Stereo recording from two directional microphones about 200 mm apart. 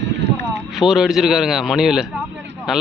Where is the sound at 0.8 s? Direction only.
Centre (ahead or behind).